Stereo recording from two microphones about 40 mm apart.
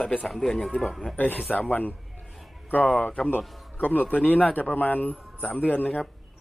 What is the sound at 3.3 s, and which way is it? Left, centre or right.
A man's voice, left.